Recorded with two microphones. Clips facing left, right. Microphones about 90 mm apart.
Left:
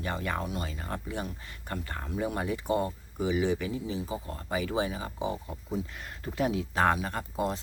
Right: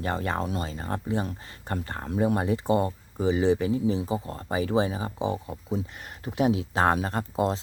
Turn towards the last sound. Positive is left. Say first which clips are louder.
# right 5 dB
turn(degrees=-25)  # may be behind; listen again after turning